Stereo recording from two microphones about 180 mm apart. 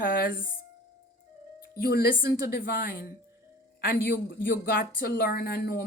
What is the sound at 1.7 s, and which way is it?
A woman's voice, 60° left (ahead or behind).